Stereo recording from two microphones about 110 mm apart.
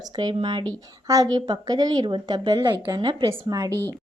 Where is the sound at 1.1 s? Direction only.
35° right (ahead or behind).